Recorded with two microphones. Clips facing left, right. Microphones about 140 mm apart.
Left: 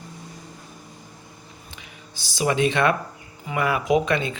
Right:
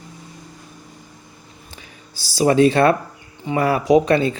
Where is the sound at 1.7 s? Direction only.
40° right (ahead or behind).